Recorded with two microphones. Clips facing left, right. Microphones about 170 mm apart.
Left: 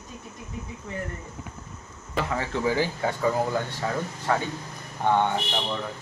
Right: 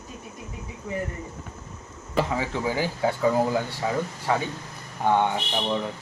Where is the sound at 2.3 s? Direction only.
10° right (ahead or behind).